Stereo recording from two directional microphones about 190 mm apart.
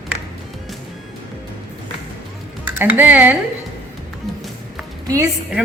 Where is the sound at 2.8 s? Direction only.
10° right (ahead or behind).